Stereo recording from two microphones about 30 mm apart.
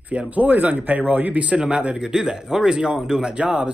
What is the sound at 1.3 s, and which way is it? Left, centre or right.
Speech, right.